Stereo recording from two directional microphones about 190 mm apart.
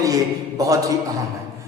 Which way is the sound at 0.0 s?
20° right (ahead or behind).